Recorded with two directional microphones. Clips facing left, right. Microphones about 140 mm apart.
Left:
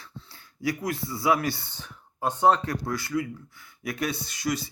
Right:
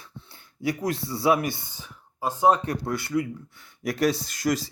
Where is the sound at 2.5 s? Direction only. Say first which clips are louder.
Right 2 dB; 25° right (ahead or behind); by 4.6 s 40° right (ahead or behind).